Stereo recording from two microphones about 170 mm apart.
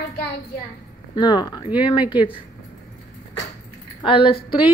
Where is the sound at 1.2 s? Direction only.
25° left (ahead or behind).